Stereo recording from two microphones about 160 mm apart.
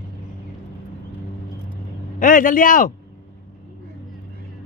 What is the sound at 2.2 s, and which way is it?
Speech, 55° left (ahead or behind).